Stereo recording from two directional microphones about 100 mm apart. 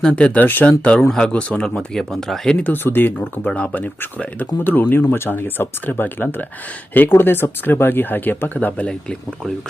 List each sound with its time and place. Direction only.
0.0 s speech: 10° left (ahead or behind)
2.6 s speech: 20° left (ahead or behind)